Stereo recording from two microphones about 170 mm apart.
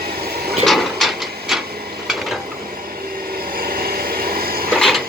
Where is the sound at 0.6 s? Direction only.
Centre (ahead or behind).